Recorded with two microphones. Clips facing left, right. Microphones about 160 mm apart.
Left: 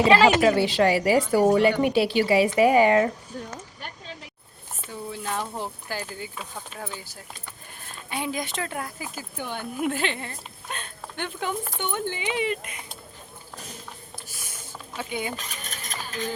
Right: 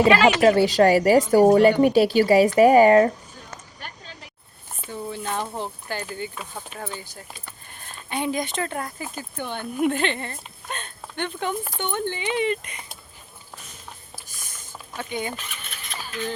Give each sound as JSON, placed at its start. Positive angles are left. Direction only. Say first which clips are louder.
{"t": 0.1, "sound": "a woman's voice", "louder": "even", "side_deg": 35}
{"t": 0.4, "sound": "a woman's voice", "louder": "right 4 dB", "side_deg": -40}
{"t": 4.9, "sound": "speech", "louder": "right 2 dB", "side_deg": 5}
{"t": 14.3, "sound": "a sound", "louder": "left 2 dB", "side_deg": 10}
{"t": 14.9, "sound": "speech", "louder": "right 1 dB", "side_deg": 5}
{"t": 15.4, "sound": "mechanisms", "louder": "left 1 dB", "side_deg": 40}